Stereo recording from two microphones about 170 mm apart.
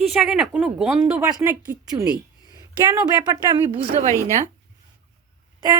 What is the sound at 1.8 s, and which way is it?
Speech, 20° right (ahead or behind).